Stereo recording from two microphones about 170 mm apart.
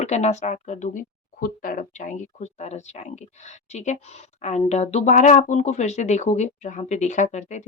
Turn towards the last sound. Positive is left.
turn(degrees=45)  # may be behind; listen again after turning